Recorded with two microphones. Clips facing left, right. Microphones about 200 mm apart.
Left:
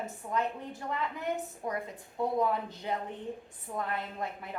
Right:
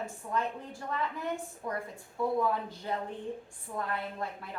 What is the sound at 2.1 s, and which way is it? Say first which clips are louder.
A woman's voice: even; 20° left (ahead or behind).